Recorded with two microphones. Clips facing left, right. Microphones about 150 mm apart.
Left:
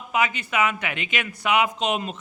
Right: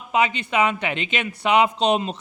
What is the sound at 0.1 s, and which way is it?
A man's voice, 25° right (ahead or behind).